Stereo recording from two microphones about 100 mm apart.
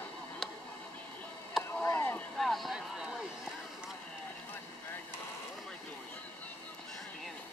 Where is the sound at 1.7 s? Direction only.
25° left (ahead or behind).